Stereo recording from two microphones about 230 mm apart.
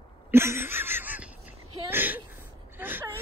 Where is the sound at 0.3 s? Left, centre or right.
Centre.